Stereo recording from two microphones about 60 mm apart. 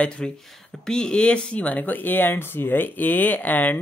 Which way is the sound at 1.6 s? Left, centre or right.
Left.